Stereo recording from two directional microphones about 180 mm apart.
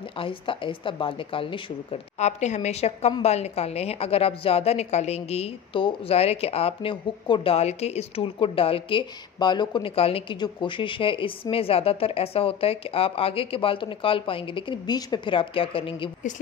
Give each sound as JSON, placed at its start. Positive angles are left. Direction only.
{"t": 0.2, "sound": "speech", "side_deg": 30}